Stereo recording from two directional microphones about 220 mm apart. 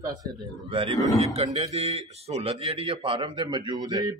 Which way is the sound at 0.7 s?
25° right (ahead or behind).